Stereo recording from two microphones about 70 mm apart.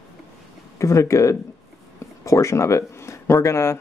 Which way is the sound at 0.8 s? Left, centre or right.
Left.